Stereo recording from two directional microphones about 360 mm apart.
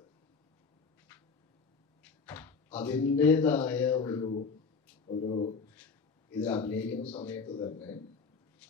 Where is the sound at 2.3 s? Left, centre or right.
Centre.